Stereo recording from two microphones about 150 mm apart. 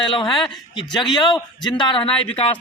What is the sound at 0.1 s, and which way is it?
Speech, 35° left (ahead or behind).